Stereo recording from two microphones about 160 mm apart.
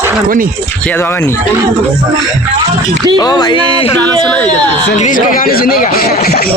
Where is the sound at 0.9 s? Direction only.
15° left (ahead or behind).